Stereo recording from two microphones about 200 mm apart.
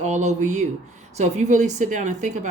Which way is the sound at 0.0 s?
35° right (ahead or behind).